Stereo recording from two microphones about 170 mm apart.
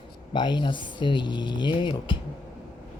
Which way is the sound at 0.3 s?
25° left (ahead or behind).